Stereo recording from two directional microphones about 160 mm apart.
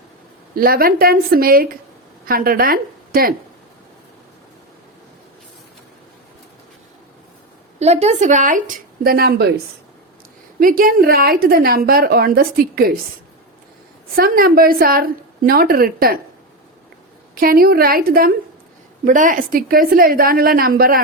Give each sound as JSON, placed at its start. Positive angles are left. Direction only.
{"t": 0.5, "sound": "a woman's voice", "side_deg": -70}
{"t": 7.8, "sound": "speech", "side_deg": -45}
{"t": 10.6, "sound": "a woman's voice", "side_deg": -60}
{"t": 14.2, "sound": "a woman's voice", "side_deg": -65}
{"t": 17.4, "sound": "a woman's voice", "side_deg": -70}
{"t": 19.0, "sound": "a woman's voice", "side_deg": -55}